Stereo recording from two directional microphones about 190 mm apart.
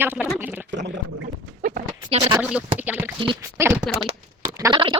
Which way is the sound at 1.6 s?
45° right (ahead or behind).